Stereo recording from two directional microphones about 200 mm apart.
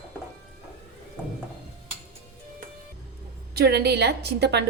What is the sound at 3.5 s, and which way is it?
A woman's voice, 50° right (ahead or behind).